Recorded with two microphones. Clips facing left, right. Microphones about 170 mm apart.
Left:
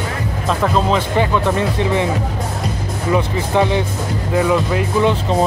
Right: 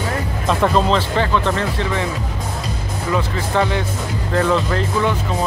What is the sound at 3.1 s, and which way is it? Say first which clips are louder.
Speech: left 3 dB; 15° left (ahead or behind).